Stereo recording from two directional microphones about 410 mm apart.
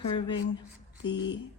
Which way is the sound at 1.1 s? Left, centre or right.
Left.